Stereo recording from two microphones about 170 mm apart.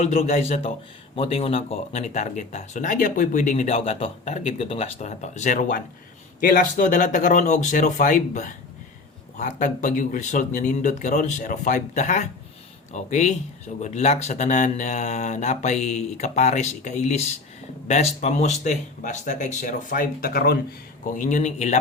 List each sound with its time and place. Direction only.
0.0 s a man's voice: 40° left (ahead or behind); by 20.6 s 65° left (ahead or behind)
21.1 s speech: 50° left (ahead or behind)